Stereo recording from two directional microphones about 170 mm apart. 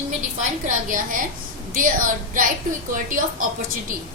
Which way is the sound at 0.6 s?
50° right (ahead or behind).